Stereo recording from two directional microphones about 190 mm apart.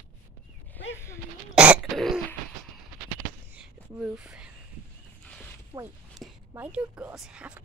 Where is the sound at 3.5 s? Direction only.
5° right (ahead or behind).